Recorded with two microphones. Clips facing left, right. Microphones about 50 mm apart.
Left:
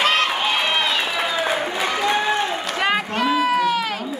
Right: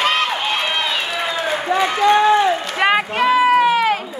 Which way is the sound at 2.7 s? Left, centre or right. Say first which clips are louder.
Right 4 dB; centre.